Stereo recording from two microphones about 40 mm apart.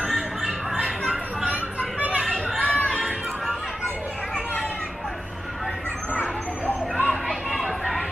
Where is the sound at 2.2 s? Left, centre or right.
Centre.